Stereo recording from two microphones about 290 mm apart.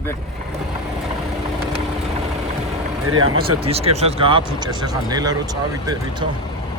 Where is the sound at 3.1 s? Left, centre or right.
Right.